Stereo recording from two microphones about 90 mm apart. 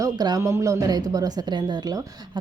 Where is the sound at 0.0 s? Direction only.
45° right (ahead or behind).